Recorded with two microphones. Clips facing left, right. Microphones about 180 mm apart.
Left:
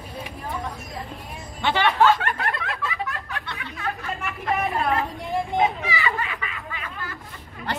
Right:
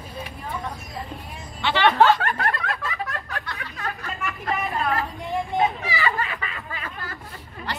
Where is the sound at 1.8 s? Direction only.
45° right (ahead or behind).